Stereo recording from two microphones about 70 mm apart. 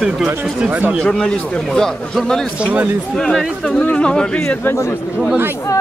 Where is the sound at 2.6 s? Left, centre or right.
Centre.